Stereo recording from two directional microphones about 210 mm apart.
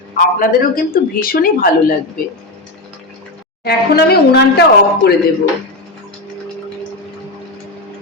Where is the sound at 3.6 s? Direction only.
50° left (ahead or behind).